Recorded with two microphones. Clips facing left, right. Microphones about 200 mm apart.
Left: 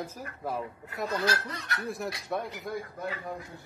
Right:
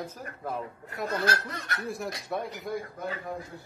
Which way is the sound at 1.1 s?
50° right (ahead or behind).